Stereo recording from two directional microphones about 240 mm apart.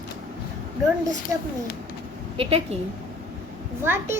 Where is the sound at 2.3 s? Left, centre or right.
Right.